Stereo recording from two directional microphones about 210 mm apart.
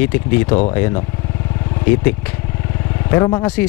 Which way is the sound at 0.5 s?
25° left (ahead or behind).